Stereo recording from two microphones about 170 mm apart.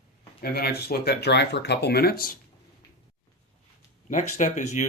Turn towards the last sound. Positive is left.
turn(degrees=45)  # may be behind; listen again after turning